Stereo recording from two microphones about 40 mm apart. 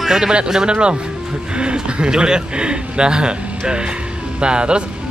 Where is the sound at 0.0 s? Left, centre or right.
Centre.